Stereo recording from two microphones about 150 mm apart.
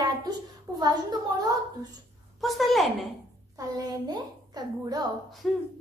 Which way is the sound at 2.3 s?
Centre (ahead or behind).